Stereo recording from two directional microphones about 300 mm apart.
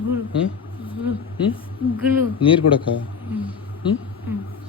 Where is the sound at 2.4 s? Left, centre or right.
Centre.